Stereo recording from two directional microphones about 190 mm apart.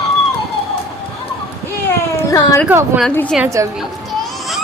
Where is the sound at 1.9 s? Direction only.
15° left (ahead or behind).